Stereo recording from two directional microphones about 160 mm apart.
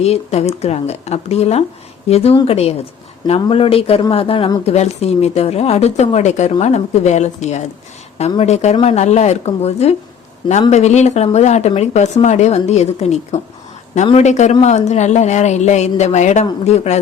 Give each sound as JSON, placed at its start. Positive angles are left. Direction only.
{"t": 0.0, "sound": "speech", "side_deg": 40}